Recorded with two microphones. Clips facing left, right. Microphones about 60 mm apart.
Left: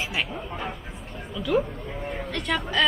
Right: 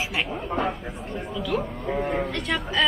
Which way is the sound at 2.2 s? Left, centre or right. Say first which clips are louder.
Even; centre.